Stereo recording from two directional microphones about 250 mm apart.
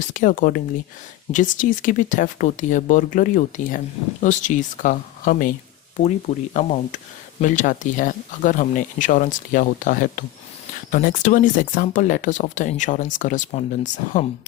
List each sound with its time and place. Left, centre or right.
0.0 s speech: left